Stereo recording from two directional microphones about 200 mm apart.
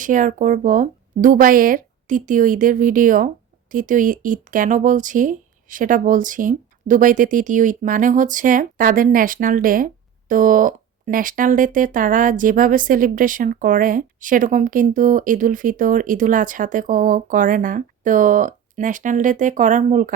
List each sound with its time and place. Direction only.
0.0 s speech: 40° right (ahead or behind)